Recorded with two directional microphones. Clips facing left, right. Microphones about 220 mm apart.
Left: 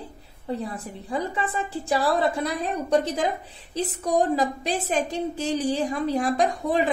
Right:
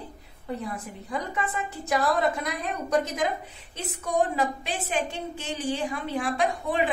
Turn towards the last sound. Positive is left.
turn(degrees=40)  # may be behind; listen again after turning